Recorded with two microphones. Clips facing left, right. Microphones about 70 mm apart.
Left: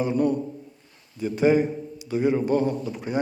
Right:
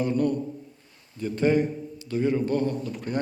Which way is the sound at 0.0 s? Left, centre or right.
Centre.